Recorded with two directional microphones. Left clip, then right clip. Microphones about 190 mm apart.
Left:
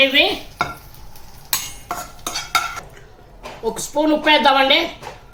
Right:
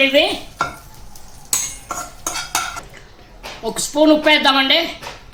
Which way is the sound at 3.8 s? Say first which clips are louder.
Right 6 dB; 35° right (ahead or behind).